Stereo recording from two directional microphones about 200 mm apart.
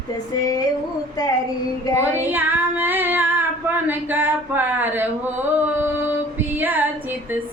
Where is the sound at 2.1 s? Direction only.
10° right (ahead or behind).